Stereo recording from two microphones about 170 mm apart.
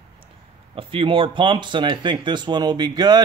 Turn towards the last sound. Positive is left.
turn(degrees=-25)  # may be behind; listen again after turning